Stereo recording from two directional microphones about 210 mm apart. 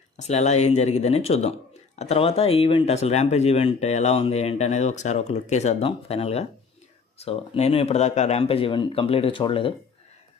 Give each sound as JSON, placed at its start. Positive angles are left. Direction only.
{"t": 0.2, "sound": "speech", "side_deg": 30}